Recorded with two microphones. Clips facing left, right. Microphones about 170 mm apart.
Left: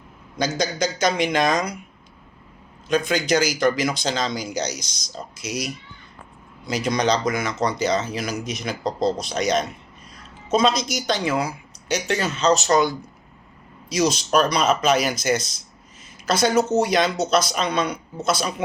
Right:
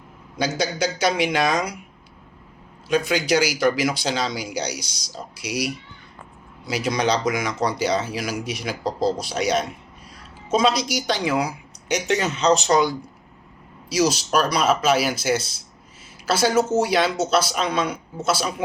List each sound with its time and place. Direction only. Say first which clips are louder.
0.3 s speech: even; 10° right (ahead or behind)
2.9 s a woman's voice: even; 10° right (ahead or behind)